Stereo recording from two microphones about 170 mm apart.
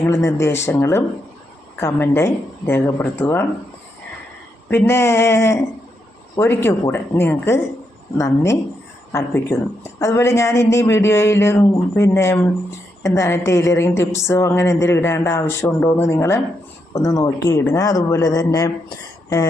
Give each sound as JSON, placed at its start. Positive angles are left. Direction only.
{"t": 0.0, "sound": "speech", "side_deg": 15}
{"t": 4.7, "sound": "speech", "side_deg": 15}
{"t": 9.1, "sound": "a man's voice", "side_deg": 15}